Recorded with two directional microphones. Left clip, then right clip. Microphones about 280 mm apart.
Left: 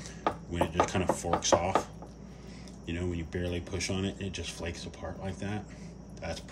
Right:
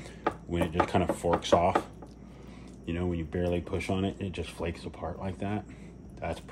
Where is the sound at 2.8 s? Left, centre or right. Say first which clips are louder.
Right 3 dB; centre.